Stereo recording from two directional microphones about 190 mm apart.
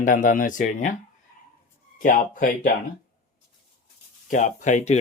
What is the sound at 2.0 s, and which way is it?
Speech, 45° left (ahead or behind).